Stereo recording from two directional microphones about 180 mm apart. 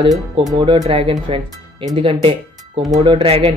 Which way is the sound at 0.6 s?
25° right (ahead or behind).